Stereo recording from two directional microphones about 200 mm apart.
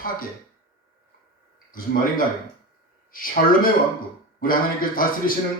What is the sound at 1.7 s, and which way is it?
Speech, 45° left (ahead or behind).